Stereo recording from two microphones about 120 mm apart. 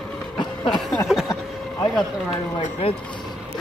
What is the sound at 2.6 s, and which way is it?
Speech, 55° left (ahead or behind).